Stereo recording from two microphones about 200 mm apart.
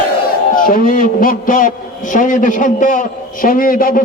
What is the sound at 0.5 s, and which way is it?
A man's voice, 45° left (ahead or behind).